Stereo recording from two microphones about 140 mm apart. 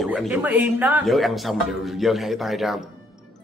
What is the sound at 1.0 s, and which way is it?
A man's voice, centre (ahead or behind).